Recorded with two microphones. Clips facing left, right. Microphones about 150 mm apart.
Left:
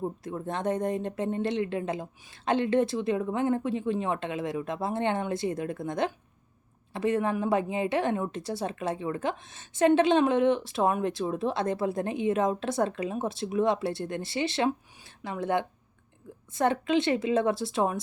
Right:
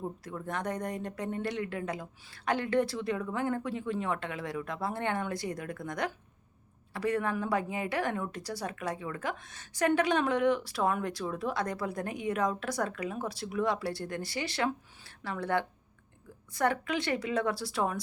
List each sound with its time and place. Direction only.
0.0 s a woman's voice: 25° left (ahead or behind)